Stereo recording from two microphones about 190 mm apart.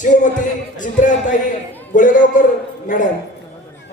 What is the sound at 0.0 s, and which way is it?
Music, 40° left (ahead or behind).